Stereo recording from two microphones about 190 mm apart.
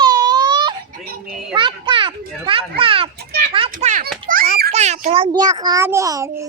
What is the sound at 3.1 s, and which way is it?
Children playing, 55° right (ahead or behind).